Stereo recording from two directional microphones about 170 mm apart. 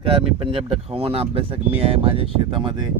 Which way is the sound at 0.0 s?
30° right (ahead or behind).